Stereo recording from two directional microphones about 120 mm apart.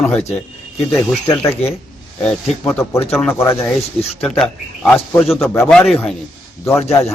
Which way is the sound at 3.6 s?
Centre (ahead or behind).